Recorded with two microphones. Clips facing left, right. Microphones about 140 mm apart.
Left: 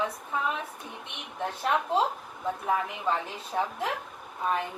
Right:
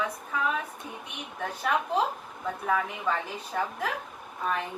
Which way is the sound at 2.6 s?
25° left (ahead or behind).